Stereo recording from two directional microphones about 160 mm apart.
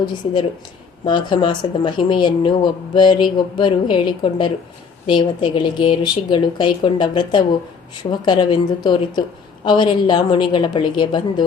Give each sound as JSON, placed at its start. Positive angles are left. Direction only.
{"t": 1.0, "sound": "a woman's voice", "side_deg": 30}